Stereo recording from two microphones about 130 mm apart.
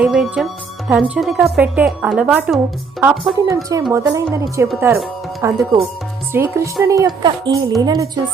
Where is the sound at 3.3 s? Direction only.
25° right (ahead or behind).